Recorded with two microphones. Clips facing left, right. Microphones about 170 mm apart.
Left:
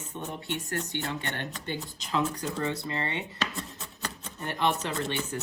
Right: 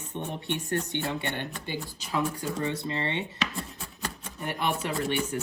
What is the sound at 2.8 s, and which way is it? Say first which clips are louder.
Speech: right 2 dB; 25° right (ahead or behind).